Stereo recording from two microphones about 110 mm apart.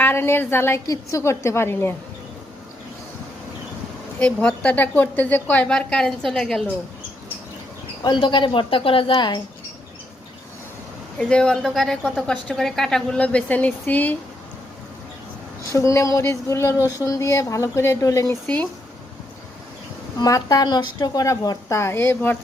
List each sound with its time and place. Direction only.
0.0 s a woman's voice: 20° left (ahead or behind)
4.2 s a woman's voice: 10° left (ahead or behind)
8.0 s speech: 45° left (ahead or behind)
9.1 s speech: 40° left (ahead or behind)
11.2 s a woman's voice: 10° left (ahead or behind)
15.7 s a woman's voice: 30° left (ahead or behind)
18.4 s a woman's voice: 15° left (ahead or behind)
20.1 s a woman's voice: 30° left (ahead or behind)